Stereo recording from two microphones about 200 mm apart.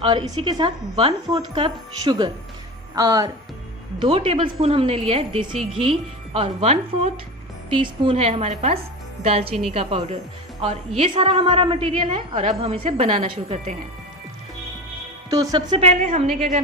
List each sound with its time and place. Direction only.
0.0 s a woman's voice: 25° right (ahead or behind)
15.2 s a woman's voice: 15° right (ahead or behind)
15.8 s a woman's voice: 35° right (ahead or behind)